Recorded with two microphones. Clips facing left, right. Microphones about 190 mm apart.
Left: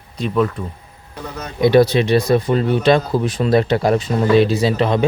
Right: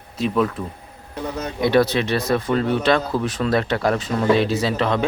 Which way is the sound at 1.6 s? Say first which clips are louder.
Left 5 dB; 15° left (ahead or behind).